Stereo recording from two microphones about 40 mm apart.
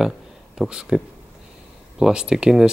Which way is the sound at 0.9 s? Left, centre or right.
Centre.